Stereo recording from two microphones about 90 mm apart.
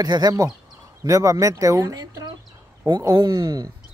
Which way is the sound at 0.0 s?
45° right (ahead or behind).